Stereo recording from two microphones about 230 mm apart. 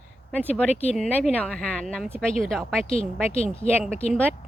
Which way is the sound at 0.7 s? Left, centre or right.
Left.